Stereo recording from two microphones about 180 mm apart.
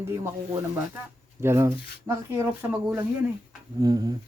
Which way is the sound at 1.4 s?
15° right (ahead or behind).